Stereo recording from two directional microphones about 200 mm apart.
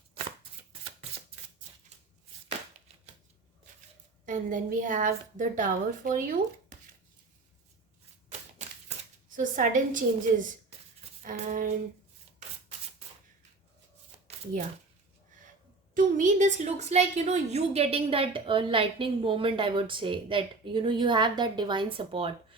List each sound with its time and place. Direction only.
4.3 s a woman's voice: 40° right (ahead or behind)
9.3 s a woman's voice: 40° right (ahead or behind)
16.0 s a woman's voice: 40° right (ahead or behind)